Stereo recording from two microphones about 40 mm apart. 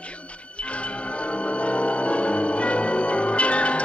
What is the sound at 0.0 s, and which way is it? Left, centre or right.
Music, left.